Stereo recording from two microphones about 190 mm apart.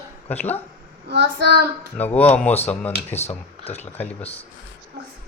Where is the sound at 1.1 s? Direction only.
60° right (ahead or behind).